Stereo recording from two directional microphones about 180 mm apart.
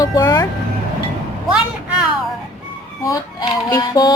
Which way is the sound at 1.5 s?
5° right (ahead or behind).